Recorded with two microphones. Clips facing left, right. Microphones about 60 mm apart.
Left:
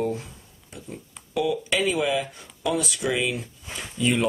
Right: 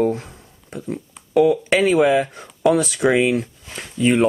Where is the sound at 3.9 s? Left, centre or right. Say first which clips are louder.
Right 7 dB; right.